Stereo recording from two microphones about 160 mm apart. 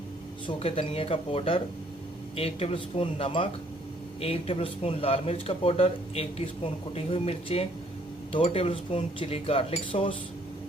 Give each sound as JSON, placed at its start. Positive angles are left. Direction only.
{"t": 0.4, "sound": "speech", "side_deg": 35}